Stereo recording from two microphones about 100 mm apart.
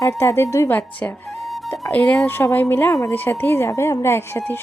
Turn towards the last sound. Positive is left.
turn(degrees=25)  # may be behind; listen again after turning